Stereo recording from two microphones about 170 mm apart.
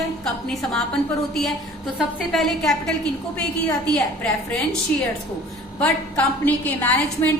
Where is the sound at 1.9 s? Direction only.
Centre (ahead or behind).